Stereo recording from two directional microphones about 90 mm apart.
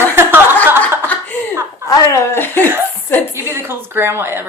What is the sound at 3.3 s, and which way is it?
A woman's voice, 30° right (ahead or behind).